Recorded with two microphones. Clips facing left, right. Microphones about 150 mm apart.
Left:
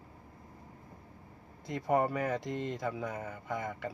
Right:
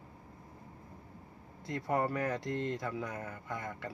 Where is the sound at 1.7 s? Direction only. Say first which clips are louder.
Left 3 dB; 20° left (ahead or behind).